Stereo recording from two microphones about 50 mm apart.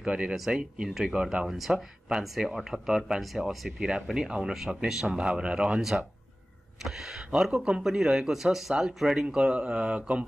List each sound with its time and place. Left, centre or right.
0.0 s speech: centre
5.1 s speech: right
5.8 s speech: centre; by 10.2 s right